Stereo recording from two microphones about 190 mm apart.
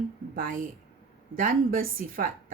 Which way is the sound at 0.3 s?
45° right (ahead or behind).